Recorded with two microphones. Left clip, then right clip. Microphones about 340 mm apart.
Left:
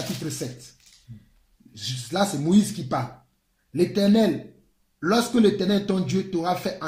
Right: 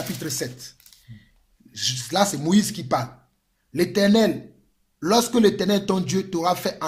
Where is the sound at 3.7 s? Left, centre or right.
Right.